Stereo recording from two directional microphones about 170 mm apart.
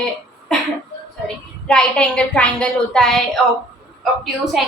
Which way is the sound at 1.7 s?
5° left (ahead or behind).